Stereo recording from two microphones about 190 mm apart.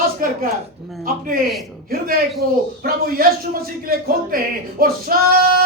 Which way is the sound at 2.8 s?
50° right (ahead or behind).